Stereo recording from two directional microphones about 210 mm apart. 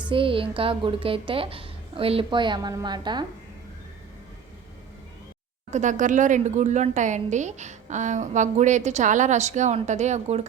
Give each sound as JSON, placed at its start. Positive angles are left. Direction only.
{"t": 0.1, "sound": "a woman's voice", "side_deg": -25}
{"t": 5.7, "sound": "a woman's voice", "side_deg": -35}